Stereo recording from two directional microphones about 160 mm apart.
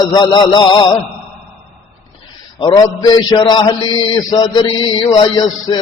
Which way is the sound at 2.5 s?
25° left (ahead or behind).